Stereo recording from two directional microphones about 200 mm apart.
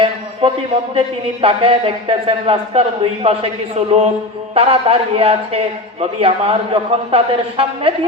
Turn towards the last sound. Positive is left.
turn(degrees=-30)  # may be behind; listen again after turning